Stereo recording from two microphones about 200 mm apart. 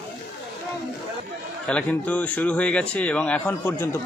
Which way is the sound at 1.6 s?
5° left (ahead or behind).